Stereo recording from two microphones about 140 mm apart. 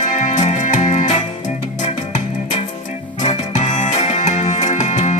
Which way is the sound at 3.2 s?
55° left (ahead or behind).